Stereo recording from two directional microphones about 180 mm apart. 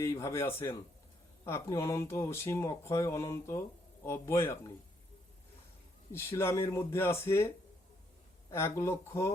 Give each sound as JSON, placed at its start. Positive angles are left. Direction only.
{"t": 0.0, "sound": "speech", "side_deg": 15}
{"t": 6.1, "sound": "speech", "side_deg": 15}